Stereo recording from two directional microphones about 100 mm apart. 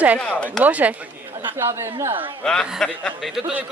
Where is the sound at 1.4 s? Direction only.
25° right (ahead or behind).